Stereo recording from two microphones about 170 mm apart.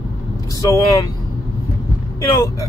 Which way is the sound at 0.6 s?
20° left (ahead or behind).